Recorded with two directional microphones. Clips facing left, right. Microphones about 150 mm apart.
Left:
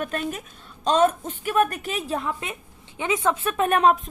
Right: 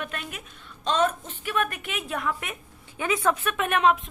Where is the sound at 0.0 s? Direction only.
40° left (ahead or behind).